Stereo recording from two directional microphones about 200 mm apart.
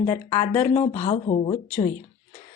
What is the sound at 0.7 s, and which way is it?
Speech, 35° left (ahead or behind).